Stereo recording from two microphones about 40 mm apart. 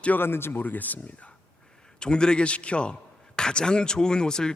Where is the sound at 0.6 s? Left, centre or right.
Left.